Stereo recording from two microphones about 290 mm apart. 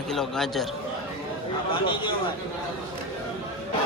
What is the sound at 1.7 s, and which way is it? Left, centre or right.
Speech, centre.